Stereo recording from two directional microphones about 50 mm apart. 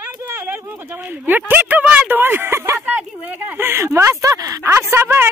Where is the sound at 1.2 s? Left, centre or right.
Right.